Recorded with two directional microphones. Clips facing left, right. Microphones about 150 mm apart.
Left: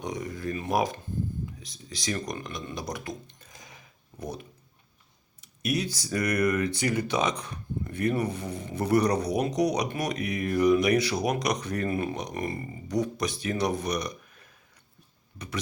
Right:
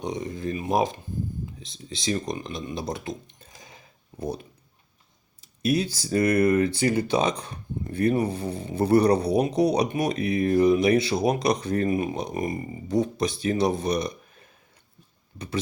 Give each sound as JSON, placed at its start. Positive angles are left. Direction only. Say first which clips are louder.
{"t": 0.0, "sound": "speech", "louder": "right 3 dB", "side_deg": -25}
{"t": 2.7, "sound": "a sound", "louder": "right 4 dB", "side_deg": -25}
{"t": 5.4, "sound": "speech", "louder": "right 5 dB", "side_deg": -30}
{"t": 11.9, "sound": "speech", "louder": "right 4 dB", "side_deg": -15}
{"t": 12.1, "sound": "speech", "louder": "right 4 dB", "side_deg": -30}